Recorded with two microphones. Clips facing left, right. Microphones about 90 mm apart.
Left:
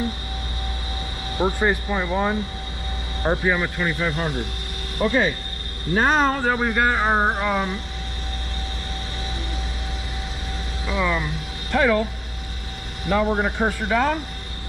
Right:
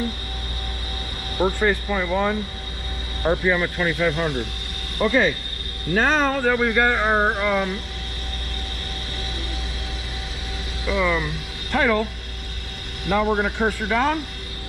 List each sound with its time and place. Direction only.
1.6 s speech: 20° left (ahead or behind)
3.3 s speech: 10° left (ahead or behind)
5.9 s speech: 20° left (ahead or behind)
10.9 s speech: centre (ahead or behind)